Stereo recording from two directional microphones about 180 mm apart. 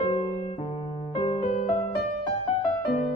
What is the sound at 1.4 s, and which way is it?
Music, 40° left (ahead or behind).